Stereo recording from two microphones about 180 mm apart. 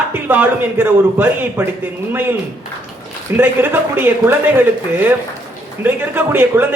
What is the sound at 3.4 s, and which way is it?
A man's voice, 10° right (ahead or behind).